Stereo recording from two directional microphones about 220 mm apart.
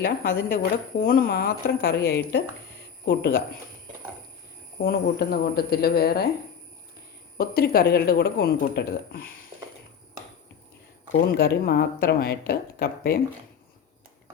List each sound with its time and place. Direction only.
0.0 s speech: 40° left (ahead or behind)
4.8 s speech: 45° left (ahead or behind)
7.3 s speech: 45° left (ahead or behind)
11.3 s speech: 45° left (ahead or behind)